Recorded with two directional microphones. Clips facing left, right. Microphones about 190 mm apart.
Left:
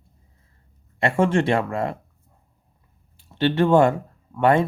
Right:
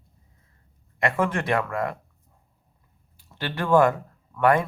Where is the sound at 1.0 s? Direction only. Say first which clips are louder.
Left 5 dB; 30° left (ahead or behind).